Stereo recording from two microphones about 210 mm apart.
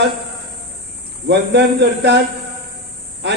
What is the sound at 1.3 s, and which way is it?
Speech, 55° right (ahead or behind).